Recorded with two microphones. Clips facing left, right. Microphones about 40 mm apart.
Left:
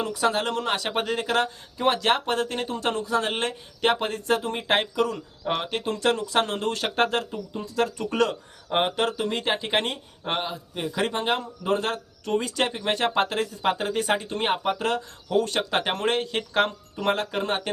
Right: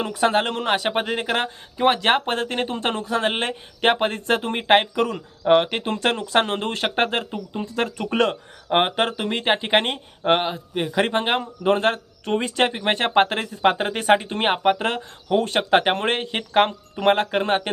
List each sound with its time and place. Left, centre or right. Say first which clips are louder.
0.0 s speech: right 4 dB; right
5.4 s speech: right 12 dB; right
5.7 s speech: right 1 dB; right